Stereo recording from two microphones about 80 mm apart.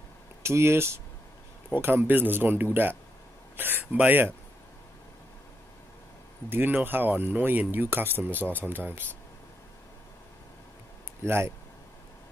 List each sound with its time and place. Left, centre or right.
0.4 s speech: right
6.5 s speech: right
11.2 s speech: right